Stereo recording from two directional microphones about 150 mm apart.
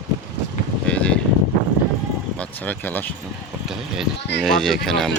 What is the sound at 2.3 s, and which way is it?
Speech, 10° left (ahead or behind).